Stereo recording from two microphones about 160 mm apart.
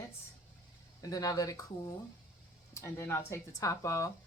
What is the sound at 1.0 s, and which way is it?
Speech, 20° left (ahead or behind).